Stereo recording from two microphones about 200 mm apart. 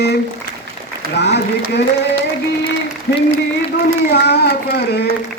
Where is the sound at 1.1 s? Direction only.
60° left (ahead or behind).